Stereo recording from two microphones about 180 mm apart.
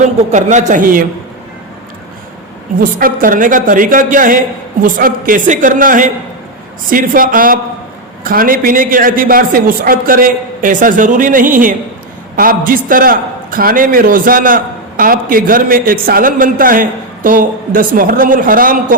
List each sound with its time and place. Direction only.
0.3 s a man's voice: 45° right (ahead or behind)
2.7 s a man's voice: 50° right (ahead or behind)